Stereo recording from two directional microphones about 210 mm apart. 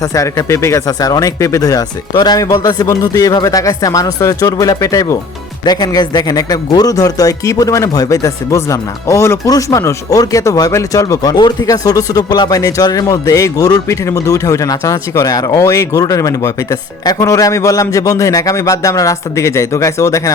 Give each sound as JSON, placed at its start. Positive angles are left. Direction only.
{"t": 0.0, "sound": "speech", "side_deg": 15}